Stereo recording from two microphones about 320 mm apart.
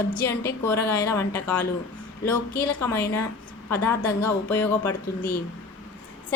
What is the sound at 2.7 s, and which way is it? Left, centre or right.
A woman's voice, centre.